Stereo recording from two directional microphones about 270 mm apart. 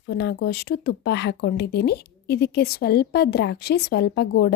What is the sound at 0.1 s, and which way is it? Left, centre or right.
Speech, left.